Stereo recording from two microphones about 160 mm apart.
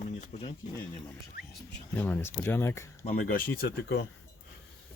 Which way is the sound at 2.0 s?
10° left (ahead or behind).